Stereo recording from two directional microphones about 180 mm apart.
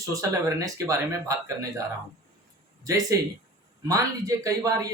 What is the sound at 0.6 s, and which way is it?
Speech, 20° right (ahead or behind).